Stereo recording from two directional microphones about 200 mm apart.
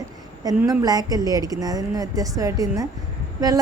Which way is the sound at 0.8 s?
20° right (ahead or behind).